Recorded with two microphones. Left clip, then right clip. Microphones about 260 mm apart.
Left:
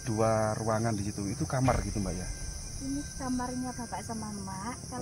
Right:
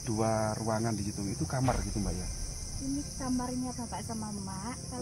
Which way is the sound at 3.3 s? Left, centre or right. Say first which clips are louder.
Left 1 dB; centre.